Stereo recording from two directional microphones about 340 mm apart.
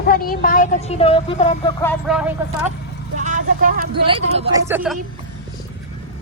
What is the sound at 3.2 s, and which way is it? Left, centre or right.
Speech, right.